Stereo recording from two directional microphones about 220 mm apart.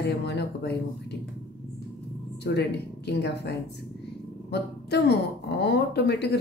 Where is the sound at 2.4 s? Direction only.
50° left (ahead or behind).